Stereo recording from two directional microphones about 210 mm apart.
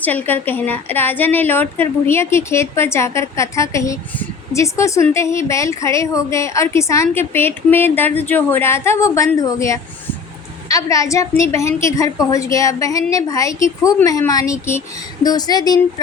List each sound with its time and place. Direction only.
0.0 s a woman's voice: 10° left (ahead or behind)